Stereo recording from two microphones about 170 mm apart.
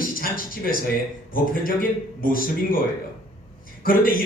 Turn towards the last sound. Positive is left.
turn(degrees=55)  # may be behind; listen again after turning